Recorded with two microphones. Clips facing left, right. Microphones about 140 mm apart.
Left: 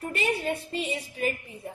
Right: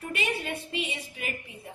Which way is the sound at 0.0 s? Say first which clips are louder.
Left 4 dB; 35° left (ahead or behind).